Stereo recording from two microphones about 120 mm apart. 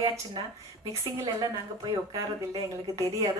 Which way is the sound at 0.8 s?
25° right (ahead or behind).